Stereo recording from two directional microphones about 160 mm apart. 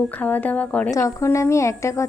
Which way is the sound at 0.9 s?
20° left (ahead or behind).